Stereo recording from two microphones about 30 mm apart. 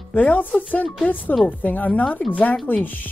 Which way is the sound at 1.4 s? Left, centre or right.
Left.